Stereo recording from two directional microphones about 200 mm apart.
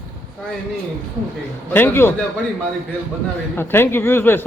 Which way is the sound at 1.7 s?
10° left (ahead or behind).